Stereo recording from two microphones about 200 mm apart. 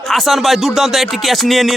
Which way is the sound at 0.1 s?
Centre (ahead or behind).